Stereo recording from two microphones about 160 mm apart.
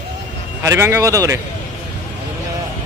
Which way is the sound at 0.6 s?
15° right (ahead or behind).